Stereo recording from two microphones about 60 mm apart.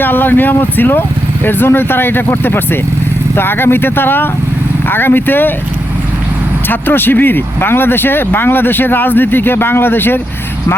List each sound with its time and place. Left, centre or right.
0.0 s speech: left
6.7 s speech: left